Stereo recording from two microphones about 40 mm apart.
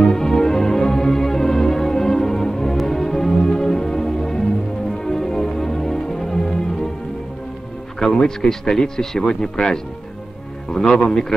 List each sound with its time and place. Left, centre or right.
0.1 s music: centre
8.0 s speech: centre
10.7 s music: centre
11.1 s speech: centre